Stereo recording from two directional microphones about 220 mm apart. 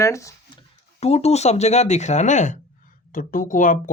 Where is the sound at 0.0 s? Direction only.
15° left (ahead or behind).